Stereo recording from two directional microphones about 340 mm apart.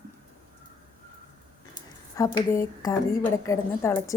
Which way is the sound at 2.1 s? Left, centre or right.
Centre.